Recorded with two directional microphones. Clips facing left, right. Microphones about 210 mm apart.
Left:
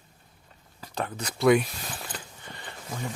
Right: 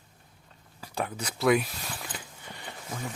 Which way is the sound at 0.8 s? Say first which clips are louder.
Even; 10° right (ahead or behind).